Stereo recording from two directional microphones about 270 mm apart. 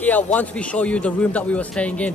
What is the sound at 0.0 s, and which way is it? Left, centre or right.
A man's voice, centre.